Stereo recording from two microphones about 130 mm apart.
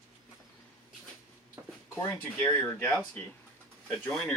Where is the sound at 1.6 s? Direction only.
20° right (ahead or behind).